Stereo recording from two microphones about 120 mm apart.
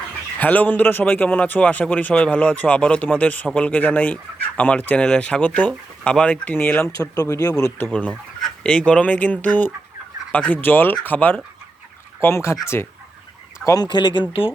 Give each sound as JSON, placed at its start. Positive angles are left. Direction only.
{"t": 0.3, "sound": "a man's voice", "side_deg": 15}
{"t": 7.0, "sound": "speech", "side_deg": 30}
{"t": 7.9, "sound": "a man's voice", "side_deg": 10}
{"t": 13.7, "sound": "speech", "side_deg": 35}